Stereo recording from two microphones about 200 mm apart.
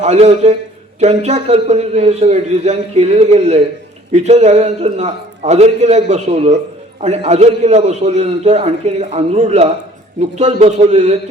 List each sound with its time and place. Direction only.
0.0 s a man's voice: 35° right (ahead or behind)